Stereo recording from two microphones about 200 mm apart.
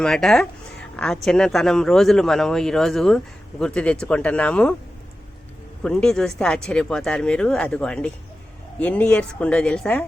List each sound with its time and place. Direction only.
0.0 s speech: 5° left (ahead or behind)
5.8 s speech: 5° left (ahead or behind)